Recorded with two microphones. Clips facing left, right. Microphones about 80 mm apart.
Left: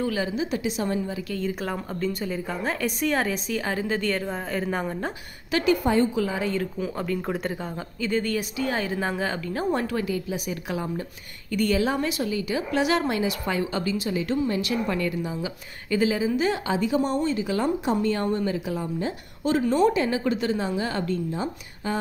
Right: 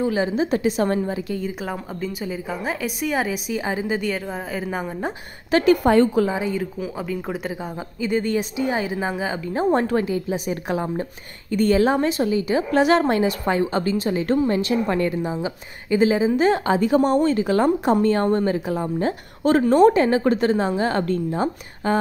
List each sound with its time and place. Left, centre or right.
0.0 s a woman's voice: right
0.4 s a woman's voice: right
1.5 s a woman's voice: centre
5.5 s a woman's voice: right
6.3 s a woman's voice: centre
8.0 s a woman's voice: centre
9.5 s a woman's voice: right